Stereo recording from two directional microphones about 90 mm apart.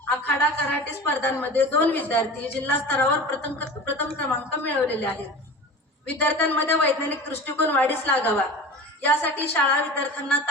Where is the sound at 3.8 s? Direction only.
20° left (ahead or behind).